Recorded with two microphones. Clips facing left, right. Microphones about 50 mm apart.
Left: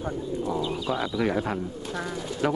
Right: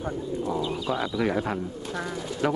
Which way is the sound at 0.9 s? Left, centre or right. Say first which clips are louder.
Even; centre.